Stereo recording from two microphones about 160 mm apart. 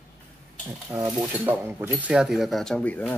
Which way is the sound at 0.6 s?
20° right (ahead or behind).